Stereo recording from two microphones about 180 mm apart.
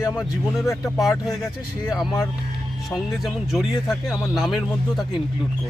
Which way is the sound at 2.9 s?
Centre (ahead or behind).